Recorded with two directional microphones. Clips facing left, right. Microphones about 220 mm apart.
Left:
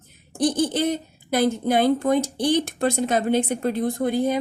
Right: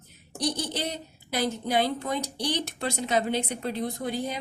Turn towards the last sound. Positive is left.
turn(degrees=50)  # may be behind; listen again after turning